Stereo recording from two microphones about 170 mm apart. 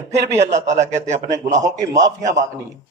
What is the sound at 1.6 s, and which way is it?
Speech, 20° right (ahead or behind).